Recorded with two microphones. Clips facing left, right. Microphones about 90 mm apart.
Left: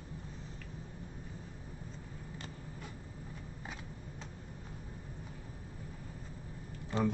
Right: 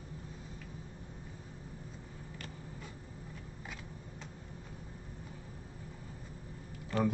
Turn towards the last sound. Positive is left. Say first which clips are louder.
# right 1 dB
turn(degrees=20)  # may be behind; listen again after turning